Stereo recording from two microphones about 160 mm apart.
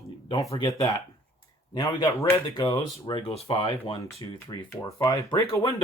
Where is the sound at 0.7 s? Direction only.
20° left (ahead or behind); by 3.7 s 35° left (ahead or behind).